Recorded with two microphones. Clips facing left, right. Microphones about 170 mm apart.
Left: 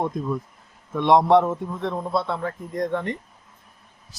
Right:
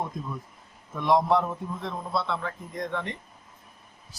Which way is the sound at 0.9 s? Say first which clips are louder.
Left 6 dB; 70° left (ahead or behind).